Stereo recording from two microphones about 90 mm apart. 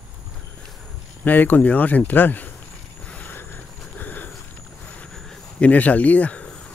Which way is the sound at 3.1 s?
20° left (ahead or behind).